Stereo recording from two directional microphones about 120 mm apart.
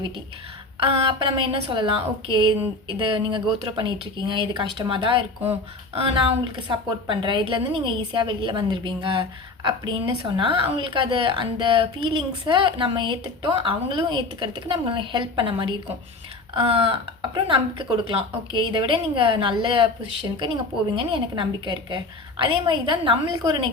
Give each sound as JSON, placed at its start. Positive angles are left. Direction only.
{"t": 0.8, "sound": "a woman's voice", "side_deg": -45}
{"t": 20.9, "sound": "a woman's voice", "side_deg": -45}